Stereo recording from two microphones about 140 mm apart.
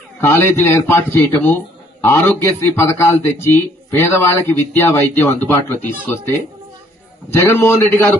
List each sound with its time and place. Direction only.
0.2 s speech: 15° left (ahead or behind)